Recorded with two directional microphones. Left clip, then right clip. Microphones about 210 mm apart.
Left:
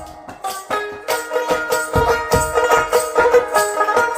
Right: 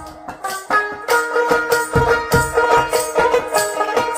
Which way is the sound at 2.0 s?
25° left (ahead or behind).